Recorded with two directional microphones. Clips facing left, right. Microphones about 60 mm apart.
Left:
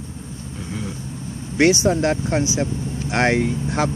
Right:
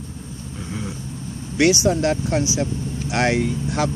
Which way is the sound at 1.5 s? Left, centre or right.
Left.